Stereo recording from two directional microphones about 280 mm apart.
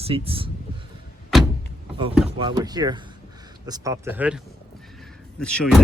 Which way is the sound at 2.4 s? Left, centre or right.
Centre.